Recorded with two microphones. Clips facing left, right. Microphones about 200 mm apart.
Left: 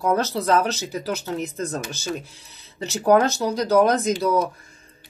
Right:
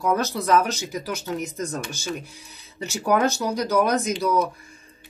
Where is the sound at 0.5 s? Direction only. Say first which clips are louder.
Even; 10° right (ahead or behind).